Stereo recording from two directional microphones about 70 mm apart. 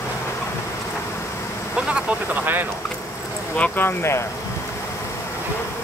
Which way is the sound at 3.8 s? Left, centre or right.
Left.